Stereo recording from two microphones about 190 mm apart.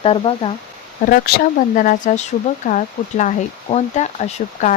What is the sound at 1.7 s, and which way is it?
Speech, 45° left (ahead or behind).